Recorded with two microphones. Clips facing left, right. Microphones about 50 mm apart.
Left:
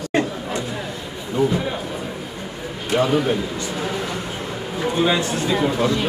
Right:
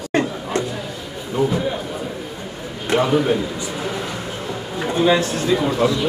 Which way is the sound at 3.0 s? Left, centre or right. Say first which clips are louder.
Right 1 dB; centre.